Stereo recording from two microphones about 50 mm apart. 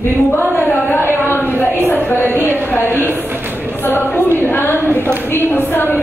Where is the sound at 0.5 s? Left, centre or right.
Left.